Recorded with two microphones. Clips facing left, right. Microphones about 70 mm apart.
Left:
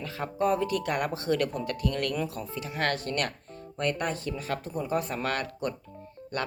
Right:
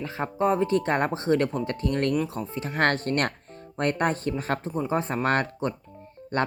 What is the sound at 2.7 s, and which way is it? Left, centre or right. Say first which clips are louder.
Speech: right 6 dB; right.